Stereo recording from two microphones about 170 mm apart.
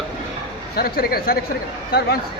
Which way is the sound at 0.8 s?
65° left (ahead or behind).